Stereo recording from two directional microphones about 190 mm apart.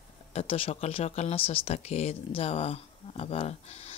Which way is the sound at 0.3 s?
30° left (ahead or behind).